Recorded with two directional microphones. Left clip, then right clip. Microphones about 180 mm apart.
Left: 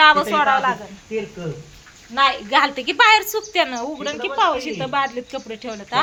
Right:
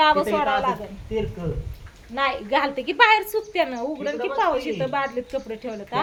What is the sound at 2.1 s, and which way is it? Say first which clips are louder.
A woman's voice: left 6 dB; 5° left (ahead or behind).